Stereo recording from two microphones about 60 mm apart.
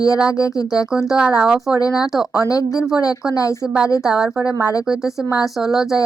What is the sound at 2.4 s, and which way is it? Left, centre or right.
Speech, left.